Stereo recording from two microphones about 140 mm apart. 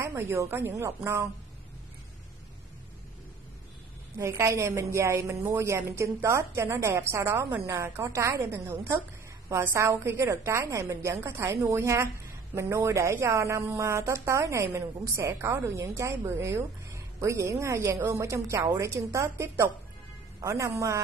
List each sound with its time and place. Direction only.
0.0 s a woman's voice: 20° right (ahead or behind)
4.2 s a woman's voice: 20° right (ahead or behind)